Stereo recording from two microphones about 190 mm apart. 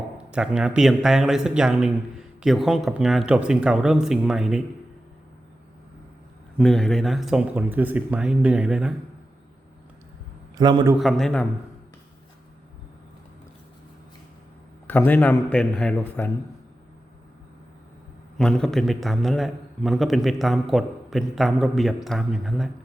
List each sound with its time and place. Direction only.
0.2 s a man's voice: 5° right (ahead or behind)
6.6 s a man's voice: centre (ahead or behind)
10.6 s a man's voice: 20° right (ahead or behind)
11.0 s a man's voice: 5° left (ahead or behind)
14.8 s a man's voice: 10° left (ahead or behind)
18.3 s a man's voice: 5° left (ahead or behind)